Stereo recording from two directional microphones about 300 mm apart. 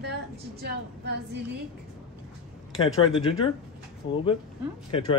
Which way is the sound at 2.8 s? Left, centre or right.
Centre.